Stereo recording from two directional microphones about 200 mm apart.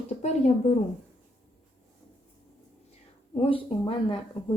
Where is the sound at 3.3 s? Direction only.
25° left (ahead or behind).